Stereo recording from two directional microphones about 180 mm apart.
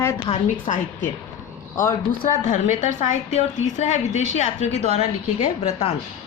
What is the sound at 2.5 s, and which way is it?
Speech, 45° left (ahead or behind).